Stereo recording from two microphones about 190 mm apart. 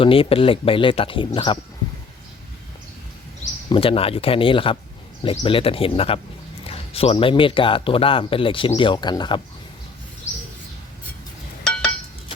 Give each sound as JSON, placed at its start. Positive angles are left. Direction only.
{"t": 0.0, "sound": "speech", "side_deg": 30}
{"t": 3.7, "sound": "speech", "side_deg": 30}
{"t": 11.6, "sound": "chink", "side_deg": 5}